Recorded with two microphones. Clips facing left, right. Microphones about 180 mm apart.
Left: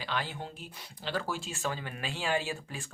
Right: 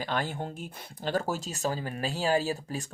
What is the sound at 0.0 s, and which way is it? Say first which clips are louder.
Speech: right 5 dB; 45° right (ahead or behind).